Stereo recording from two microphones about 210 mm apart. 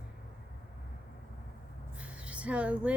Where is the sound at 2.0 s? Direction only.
5° right (ahead or behind).